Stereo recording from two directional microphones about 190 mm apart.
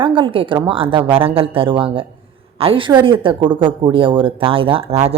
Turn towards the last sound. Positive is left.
turn(degrees=-30)  # may be behind; listen again after turning